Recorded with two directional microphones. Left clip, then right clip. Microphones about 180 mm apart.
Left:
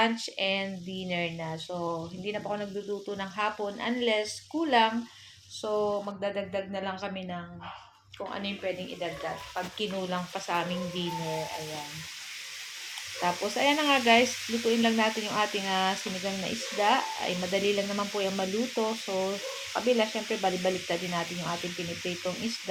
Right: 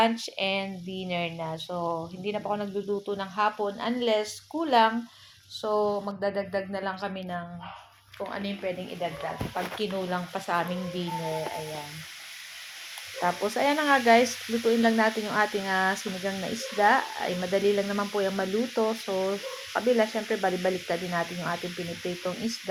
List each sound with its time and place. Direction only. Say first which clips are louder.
0.0 s speech: right 2 dB; 30° right (ahead or behind)
10.3 s speech: right 2 dB; 30° right (ahead or behind)
13.2 s speech: right 1 dB; 20° right (ahead or behind)